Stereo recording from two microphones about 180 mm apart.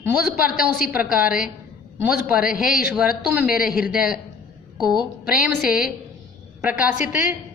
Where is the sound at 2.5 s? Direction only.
50° left (ahead or behind).